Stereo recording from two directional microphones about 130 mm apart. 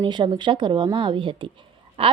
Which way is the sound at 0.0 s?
35° right (ahead or behind).